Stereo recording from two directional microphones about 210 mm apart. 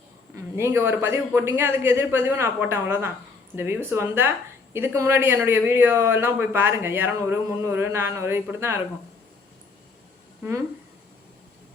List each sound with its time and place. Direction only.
0.3 s speech: 10° right (ahead or behind)